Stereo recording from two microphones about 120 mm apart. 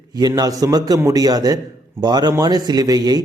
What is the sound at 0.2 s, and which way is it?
A man's voice, 30° right (ahead or behind).